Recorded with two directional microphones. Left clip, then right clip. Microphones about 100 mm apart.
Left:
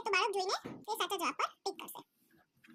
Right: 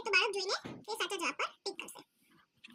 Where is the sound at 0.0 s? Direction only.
60° left (ahead or behind).